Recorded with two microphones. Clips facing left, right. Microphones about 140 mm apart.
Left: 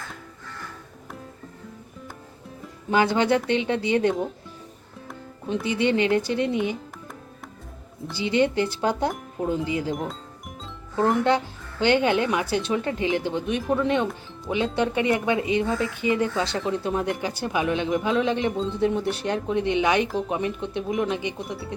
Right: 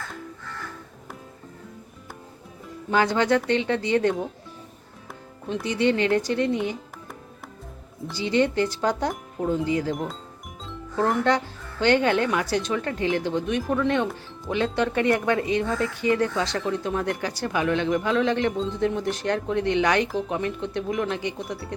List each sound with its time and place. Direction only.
2.9 s speech: 15° left (ahead or behind)
5.6 s speech: 10° left (ahead or behind)
8.2 s speech: 15° left (ahead or behind)
18.5 s speech: centre (ahead or behind); by 21.1 s 20° left (ahead or behind)
21.2 s speech: centre (ahead or behind)